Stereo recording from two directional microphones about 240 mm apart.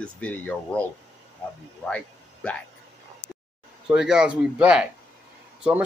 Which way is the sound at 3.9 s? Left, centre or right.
Centre.